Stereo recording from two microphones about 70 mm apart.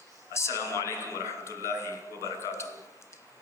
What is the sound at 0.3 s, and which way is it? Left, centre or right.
A man's voice, left.